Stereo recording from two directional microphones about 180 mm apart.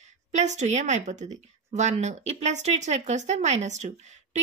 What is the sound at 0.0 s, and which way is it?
A woman's voice, 40° right (ahead or behind).